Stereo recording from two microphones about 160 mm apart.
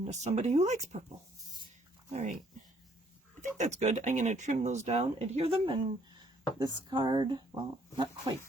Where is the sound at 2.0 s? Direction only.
45° right (ahead or behind).